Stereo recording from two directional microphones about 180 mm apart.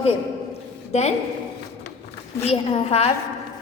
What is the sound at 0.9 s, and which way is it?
Speech, 35° left (ahead or behind).